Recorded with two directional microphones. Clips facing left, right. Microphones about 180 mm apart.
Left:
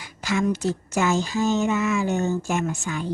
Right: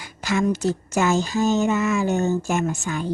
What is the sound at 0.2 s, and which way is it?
Speech, 45° right (ahead or behind).